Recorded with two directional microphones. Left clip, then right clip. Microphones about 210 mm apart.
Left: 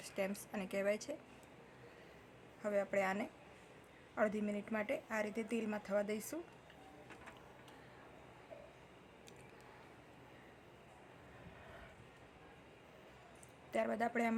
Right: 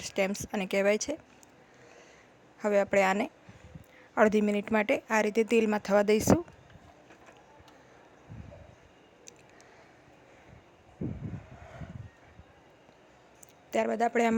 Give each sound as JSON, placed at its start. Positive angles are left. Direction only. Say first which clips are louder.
{"t": 0.0, "sound": "speech", "louder": "right 11 dB", "side_deg": -40}
{"t": 2.6, "sound": "speech", "louder": "right 12 dB", "side_deg": -40}
{"t": 13.7, "sound": "speech", "louder": "right 10 dB", "side_deg": -35}